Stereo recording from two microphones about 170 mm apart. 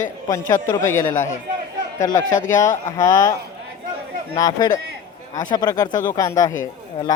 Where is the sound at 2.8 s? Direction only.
20° left (ahead or behind).